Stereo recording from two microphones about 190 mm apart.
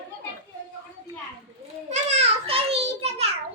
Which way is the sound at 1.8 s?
35° right (ahead or behind).